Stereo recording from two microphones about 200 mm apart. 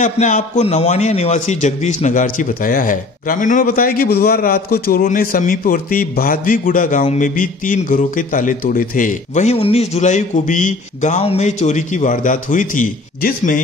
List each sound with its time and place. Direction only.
0.0 s a man's voice: 35° left (ahead or behind)